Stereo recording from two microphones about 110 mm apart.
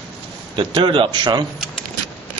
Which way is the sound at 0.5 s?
50° right (ahead or behind).